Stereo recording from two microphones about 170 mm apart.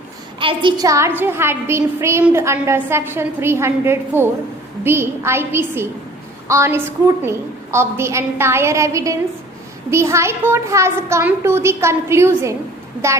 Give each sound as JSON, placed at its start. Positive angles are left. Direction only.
{"t": 0.3, "sound": "a woman's voice", "side_deg": -30}